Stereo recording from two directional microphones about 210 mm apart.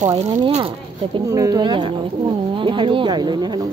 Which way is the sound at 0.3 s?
25° right (ahead or behind).